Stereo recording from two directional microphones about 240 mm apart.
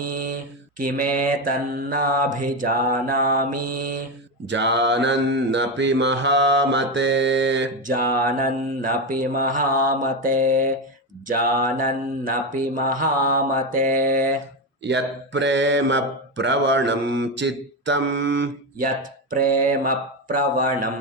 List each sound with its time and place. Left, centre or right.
0.0 s mantra: right
4.4 s mantra: right
7.9 s mantra: right
14.8 s mantra: right
19.3 s mantra: right